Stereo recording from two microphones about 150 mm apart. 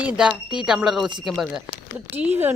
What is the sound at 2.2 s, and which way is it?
Speech, 15° right (ahead or behind).